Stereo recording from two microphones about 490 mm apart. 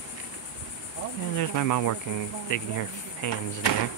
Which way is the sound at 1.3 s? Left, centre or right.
Left.